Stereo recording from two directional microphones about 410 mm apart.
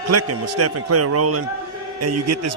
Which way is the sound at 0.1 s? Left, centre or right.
Right.